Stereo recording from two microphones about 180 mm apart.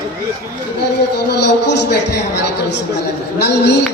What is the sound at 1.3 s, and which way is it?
A man's voice, 70° left (ahead or behind).